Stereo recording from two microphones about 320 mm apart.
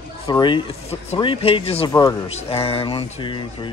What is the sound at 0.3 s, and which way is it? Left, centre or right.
Speech, centre.